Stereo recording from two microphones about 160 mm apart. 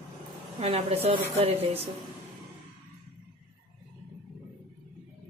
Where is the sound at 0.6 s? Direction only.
40° right (ahead or behind).